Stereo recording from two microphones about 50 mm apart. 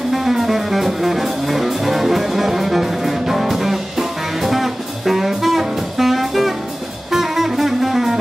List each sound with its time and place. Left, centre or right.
0.1 s music: centre